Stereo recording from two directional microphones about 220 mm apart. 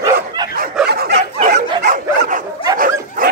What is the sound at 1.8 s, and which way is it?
Dog, 35° right (ahead or behind).